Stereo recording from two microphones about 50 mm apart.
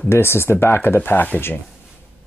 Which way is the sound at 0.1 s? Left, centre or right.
Left.